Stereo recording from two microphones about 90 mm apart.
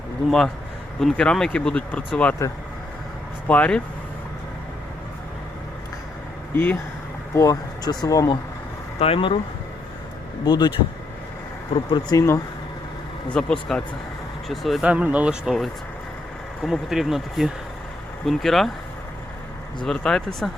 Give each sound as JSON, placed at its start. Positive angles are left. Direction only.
{"t": 0.3, "sound": "speech", "side_deg": 5}
{"t": 2.4, "sound": "speech", "side_deg": 30}
{"t": 3.4, "sound": "speech", "side_deg": 15}
{"t": 6.5, "sound": "speech", "side_deg": 20}
{"t": 7.3, "sound": "speech", "side_deg": 40}
{"t": 9.0, "sound": "speech", "side_deg": 85}
{"t": 10.4, "sound": "speech", "side_deg": 50}
{"t": 12.1, "sound": "speech", "side_deg": 30}
{"t": 13.3, "sound": "speech", "side_deg": 10}
{"t": 14.8, "sound": "speech", "side_deg": -15}
{"t": 16.6, "sound": "speech", "side_deg": -5}
{"t": 19.8, "sound": "speech", "side_deg": 10}